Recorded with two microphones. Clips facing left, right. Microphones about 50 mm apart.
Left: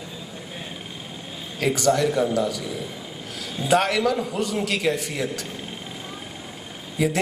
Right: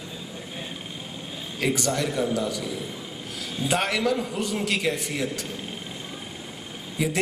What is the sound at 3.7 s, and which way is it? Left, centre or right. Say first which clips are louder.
A man's voice: left 4 dB; left.